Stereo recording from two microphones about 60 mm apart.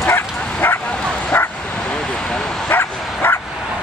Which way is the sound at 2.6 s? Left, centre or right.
Left.